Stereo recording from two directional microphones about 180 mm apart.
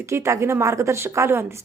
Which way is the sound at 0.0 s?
15° right (ahead or behind).